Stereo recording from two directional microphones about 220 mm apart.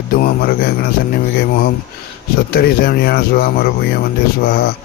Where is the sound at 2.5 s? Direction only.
45° left (ahead or behind).